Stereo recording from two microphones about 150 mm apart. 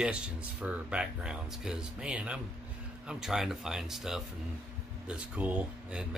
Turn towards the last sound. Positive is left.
turn(degrees=-5)  # may be behind; listen again after turning